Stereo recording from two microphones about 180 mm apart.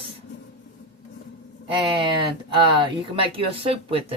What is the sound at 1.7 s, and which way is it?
Speech, 30° right (ahead or behind).